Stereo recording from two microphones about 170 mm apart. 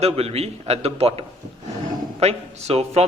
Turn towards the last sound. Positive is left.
turn(degrees=-40)  # may be behind; listen again after turning